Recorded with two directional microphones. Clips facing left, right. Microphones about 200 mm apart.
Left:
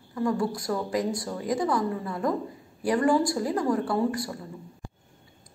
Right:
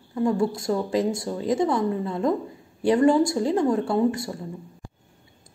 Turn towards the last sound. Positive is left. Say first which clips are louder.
# right 4 dB
turn(degrees=-20)  # may be behind; listen again after turning